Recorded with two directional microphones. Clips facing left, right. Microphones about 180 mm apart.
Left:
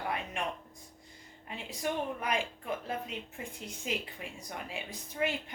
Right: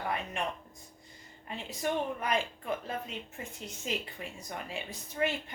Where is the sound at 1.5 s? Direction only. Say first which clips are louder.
Right 2 dB; 10° left (ahead or behind).